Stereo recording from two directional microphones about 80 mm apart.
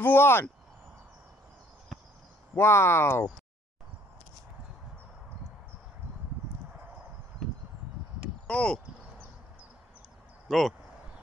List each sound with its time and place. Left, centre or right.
0.0 s speech: left
1.9 s a sound: centre
2.5 s speech: left
8.5 s speech: centre
10.5 s speech: centre